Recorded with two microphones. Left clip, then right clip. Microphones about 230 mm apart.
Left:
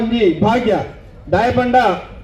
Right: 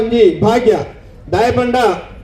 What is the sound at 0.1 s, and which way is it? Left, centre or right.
A man's voice, right.